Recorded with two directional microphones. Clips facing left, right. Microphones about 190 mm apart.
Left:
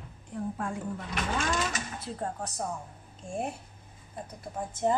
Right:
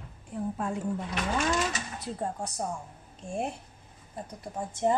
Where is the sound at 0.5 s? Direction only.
20° right (ahead or behind).